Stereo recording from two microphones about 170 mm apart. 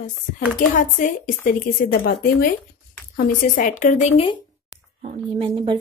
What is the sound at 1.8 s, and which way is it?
A woman's voice, 60° left (ahead or behind).